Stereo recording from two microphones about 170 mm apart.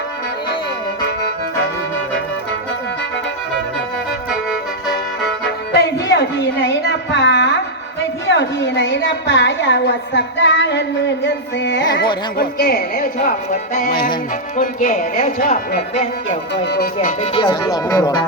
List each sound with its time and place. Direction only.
5.7 s a sound: 85° left
8.3 s a woman's voice: 90° left
12.4 s speech: 60° left (ahead or behind)
14.5 s speech: 50° left (ahead or behind)
16.6 s speech: 70° left (ahead or behind)
17.2 s speech: 30° left (ahead or behind)